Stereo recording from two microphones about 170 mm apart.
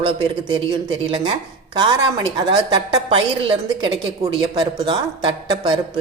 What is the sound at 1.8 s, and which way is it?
A woman's voice, 25° right (ahead or behind).